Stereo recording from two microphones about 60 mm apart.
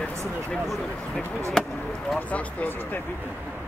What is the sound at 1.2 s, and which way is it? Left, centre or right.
Speech, right.